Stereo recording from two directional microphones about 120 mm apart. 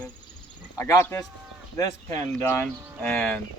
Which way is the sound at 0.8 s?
30° left (ahead or behind).